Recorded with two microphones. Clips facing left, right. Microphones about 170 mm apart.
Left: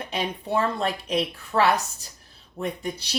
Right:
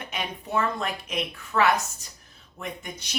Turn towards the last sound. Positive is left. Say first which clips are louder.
# left 6 dB
turn(degrees=35)  # may be behind; listen again after turning